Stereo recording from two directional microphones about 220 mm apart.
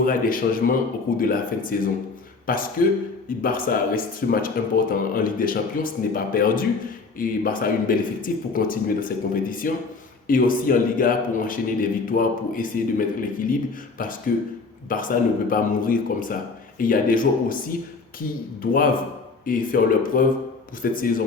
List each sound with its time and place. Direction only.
0.0 s speech: 40° left (ahead or behind)
18.6 s speech: 40° left (ahead or behind)